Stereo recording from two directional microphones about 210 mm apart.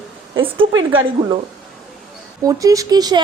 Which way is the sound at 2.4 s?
15° right (ahead or behind).